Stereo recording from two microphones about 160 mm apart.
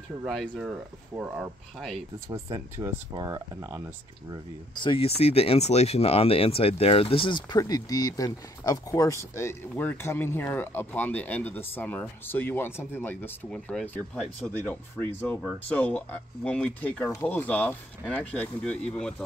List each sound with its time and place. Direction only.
0.3 s speech: 5° left (ahead or behind)
0.7 s speech: 10° right (ahead or behind)
1.8 s speech: centre (ahead or behind)
2.2 s speech: 20° right (ahead or behind)
4.7 s speech: 35° left (ahead or behind); by 19.2 s 5° left (ahead or behind)